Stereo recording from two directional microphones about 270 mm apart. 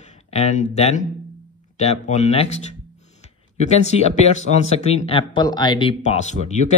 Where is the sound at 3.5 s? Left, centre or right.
Left.